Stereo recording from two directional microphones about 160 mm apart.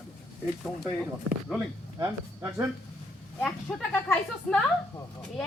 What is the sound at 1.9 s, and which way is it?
Speech, 15° right (ahead or behind).